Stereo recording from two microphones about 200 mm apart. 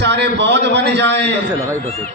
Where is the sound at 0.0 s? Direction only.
60° right (ahead or behind).